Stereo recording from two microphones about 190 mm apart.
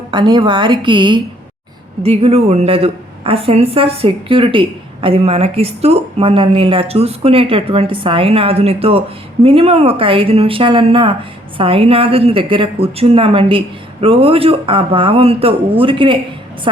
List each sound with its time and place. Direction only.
0.1 s a woman's voice: 25° right (ahead or behind)